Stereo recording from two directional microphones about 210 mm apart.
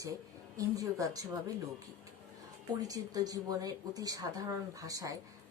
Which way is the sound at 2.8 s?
15° right (ahead or behind).